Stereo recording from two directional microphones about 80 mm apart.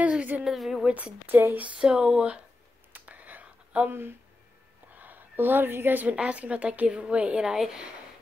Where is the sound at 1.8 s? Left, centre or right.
Centre.